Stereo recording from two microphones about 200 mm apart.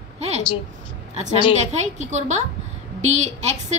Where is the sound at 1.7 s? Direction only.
35° right (ahead or behind).